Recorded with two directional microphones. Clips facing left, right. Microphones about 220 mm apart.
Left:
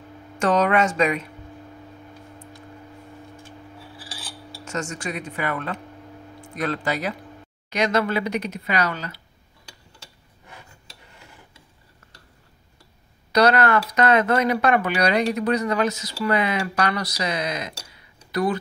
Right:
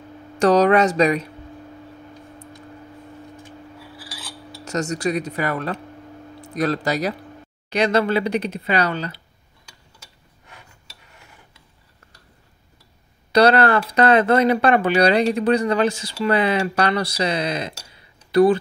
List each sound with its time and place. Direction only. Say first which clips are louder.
0.4 s speech: right 5 dB; 35° right (ahead or behind)
4.6 s speech: right 7 dB; 35° right (ahead or behind)
13.3 s speech: right 3 dB; 30° right (ahead or behind)